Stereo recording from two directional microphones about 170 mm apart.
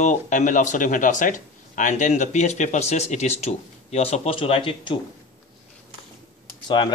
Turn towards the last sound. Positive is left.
turn(degrees=25)  # may be behind; listen again after turning